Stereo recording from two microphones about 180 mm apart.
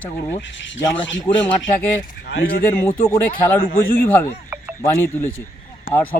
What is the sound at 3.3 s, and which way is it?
Speech, 55° left (ahead or behind).